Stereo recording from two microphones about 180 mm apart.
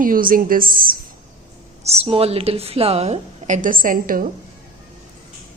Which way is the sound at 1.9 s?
35° right (ahead or behind).